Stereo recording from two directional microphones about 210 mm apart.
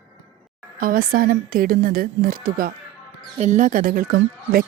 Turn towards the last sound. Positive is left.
turn(degrees=-45)  # may be behind; listen again after turning